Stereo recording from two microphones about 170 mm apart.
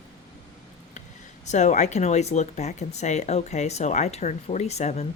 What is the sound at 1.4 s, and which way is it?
Speech, 45° left (ahead or behind).